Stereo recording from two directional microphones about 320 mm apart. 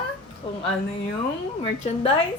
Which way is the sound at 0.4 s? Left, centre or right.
Centre.